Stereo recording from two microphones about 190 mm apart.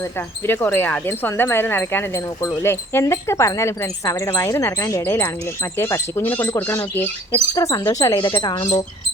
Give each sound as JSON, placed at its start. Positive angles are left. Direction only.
{"t": 0.4, "sound": "speech", "side_deg": 10}